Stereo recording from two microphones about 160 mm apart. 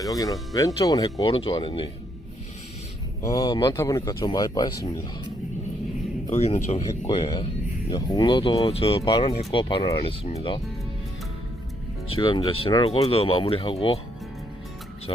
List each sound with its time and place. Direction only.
0.0 s speech: 20° left (ahead or behind)
1.2 s speech: 35° left (ahead or behind)
3.2 s speech: 20° left (ahead or behind)
6.3 s speech: 40° left (ahead or behind)
7.9 s speech: 25° left (ahead or behind)
12.0 s speech: 35° left (ahead or behind)